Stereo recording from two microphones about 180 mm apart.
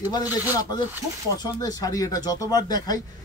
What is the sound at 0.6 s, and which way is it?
Speech, 20° left (ahead or behind).